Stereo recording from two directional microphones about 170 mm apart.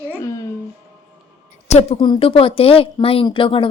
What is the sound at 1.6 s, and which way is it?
Speech, 40° left (ahead or behind).